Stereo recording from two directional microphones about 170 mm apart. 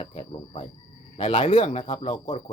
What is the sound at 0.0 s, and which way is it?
Cricket, 35° left (ahead or behind).